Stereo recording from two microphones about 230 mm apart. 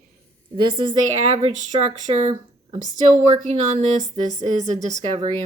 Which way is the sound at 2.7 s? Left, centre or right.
Right.